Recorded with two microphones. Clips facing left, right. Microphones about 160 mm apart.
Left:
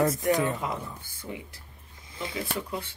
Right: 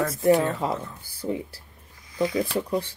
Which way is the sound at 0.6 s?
30° right (ahead or behind).